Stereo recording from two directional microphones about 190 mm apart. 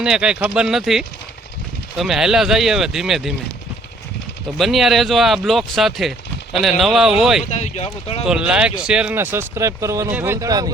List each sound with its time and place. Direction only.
0.0 s speech: 5° right (ahead or behind)
4.5 s speech: centre (ahead or behind)
7.5 s speech: 35° left (ahead or behind)
8.2 s speech: 5° right (ahead or behind)